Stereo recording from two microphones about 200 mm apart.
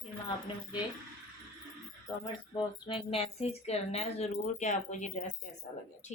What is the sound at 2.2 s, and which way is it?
Speech, 25° left (ahead or behind).